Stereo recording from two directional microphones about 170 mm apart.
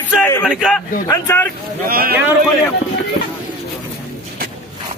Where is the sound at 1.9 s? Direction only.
60° right (ahead or behind).